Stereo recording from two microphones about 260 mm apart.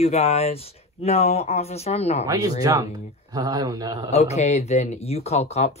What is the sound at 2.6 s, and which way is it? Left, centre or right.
A man's voice, centre.